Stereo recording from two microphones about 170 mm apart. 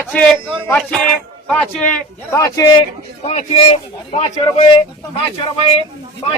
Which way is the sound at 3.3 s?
35° left (ahead or behind).